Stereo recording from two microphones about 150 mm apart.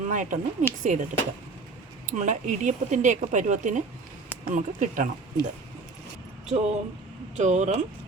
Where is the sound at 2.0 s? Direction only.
55° right (ahead or behind).